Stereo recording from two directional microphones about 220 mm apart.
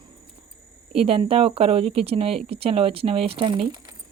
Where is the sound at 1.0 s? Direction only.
25° right (ahead or behind).